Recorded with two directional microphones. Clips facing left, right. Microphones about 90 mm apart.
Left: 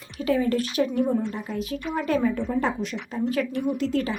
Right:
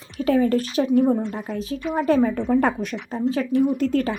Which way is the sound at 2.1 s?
35° right (ahead or behind).